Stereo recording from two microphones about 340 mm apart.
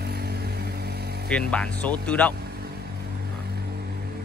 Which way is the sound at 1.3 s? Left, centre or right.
Centre.